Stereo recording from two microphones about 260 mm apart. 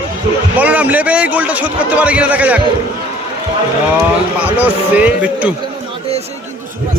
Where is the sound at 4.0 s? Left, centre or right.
Centre.